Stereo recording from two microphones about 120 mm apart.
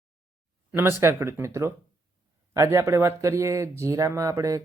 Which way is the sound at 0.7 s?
20° right (ahead or behind).